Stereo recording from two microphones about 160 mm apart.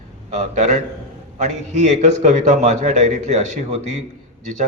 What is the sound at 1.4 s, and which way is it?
A man's voice, 50° right (ahead or behind).